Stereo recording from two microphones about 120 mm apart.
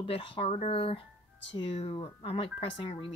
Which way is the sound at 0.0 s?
50° left (ahead or behind).